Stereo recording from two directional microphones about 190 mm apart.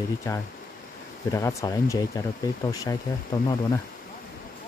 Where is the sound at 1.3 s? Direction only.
15° left (ahead or behind).